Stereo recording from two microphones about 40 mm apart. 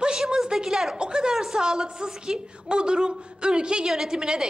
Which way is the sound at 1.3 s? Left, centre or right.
Centre.